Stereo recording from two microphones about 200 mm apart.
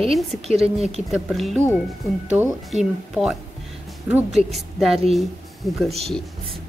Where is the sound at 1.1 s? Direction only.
Centre (ahead or behind).